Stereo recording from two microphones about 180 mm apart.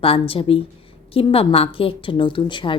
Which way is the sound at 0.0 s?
30° left (ahead or behind).